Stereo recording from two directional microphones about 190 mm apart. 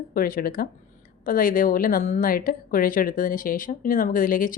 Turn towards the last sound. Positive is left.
turn(degrees=45)  # may be behind; listen again after turning